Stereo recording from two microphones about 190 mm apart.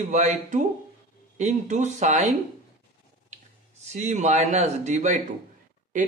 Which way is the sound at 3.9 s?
40° right (ahead or behind).